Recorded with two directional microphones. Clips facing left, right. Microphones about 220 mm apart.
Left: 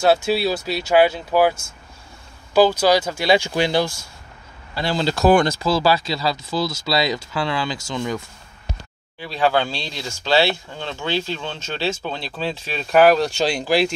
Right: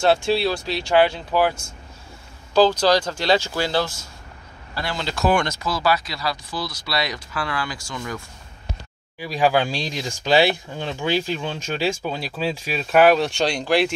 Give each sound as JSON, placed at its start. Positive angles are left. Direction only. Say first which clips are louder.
{"t": 0.0, "sound": "speech", "louder": "left 1 dB", "side_deg": 5}
{"t": 2.5, "sound": "speech", "louder": "left 1 dB", "side_deg": 10}
{"t": 4.7, "sound": "speech", "louder": "left 6 dB", "side_deg": 30}
{"t": 9.2, "sound": "speech", "louder": "even", "side_deg": -10}